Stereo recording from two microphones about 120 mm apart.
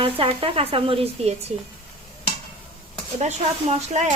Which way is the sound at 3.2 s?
65° right (ahead or behind).